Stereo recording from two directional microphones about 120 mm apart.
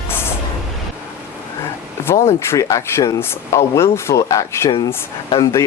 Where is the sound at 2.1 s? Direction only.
20° left (ahead or behind).